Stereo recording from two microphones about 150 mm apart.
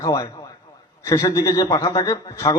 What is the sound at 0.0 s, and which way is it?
A man's voice, 20° left (ahead or behind).